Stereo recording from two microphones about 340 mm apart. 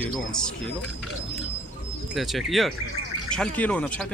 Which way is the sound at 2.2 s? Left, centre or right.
Centre.